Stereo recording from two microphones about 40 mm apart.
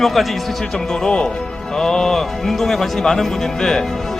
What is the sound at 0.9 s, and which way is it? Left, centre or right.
Speech, centre.